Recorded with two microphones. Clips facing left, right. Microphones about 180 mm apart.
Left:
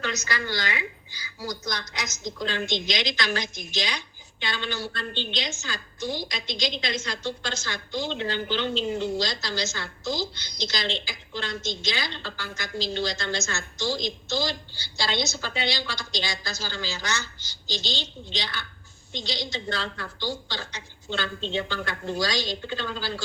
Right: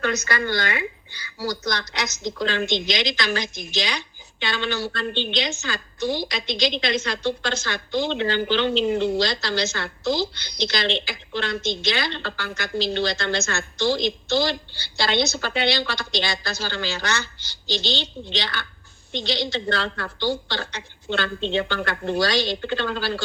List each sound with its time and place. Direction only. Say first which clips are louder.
0.0 s a woman's voice: right 6 dB; 55° right (ahead or behind)